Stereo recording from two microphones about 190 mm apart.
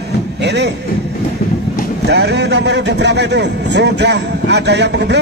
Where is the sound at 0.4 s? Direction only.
65° right (ahead or behind).